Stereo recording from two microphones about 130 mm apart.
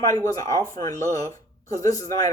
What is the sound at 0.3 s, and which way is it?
Speech, 25° left (ahead or behind).